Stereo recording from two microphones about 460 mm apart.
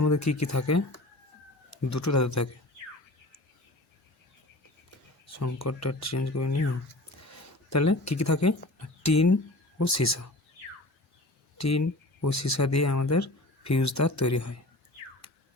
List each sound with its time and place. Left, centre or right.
0.0 s speech: left
5.2 s speech: left
7.2 s a sound: left
9.0 s speech: left
11.5 s speech: left
15.2 s a sound: left